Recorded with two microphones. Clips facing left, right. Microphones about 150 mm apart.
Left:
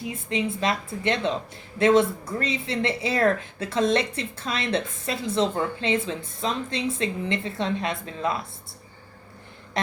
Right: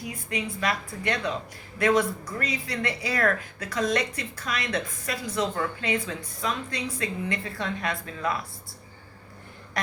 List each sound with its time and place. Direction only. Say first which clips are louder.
0.0 s speech: left 5 dB; 25° left (ahead or behind)